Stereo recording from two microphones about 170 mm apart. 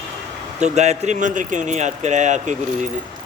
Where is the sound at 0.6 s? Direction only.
40° right (ahead or behind).